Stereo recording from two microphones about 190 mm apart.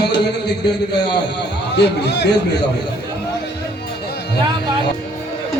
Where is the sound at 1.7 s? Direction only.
65° left (ahead or behind).